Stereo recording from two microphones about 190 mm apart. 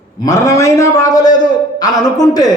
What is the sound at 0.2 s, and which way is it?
A man's voice, 15° left (ahead or behind).